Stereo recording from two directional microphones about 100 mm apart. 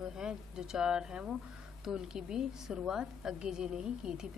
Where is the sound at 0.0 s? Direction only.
5° right (ahead or behind).